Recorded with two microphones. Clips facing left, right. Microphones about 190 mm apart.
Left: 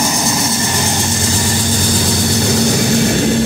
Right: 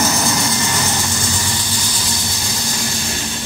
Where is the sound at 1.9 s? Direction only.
55° left (ahead or behind).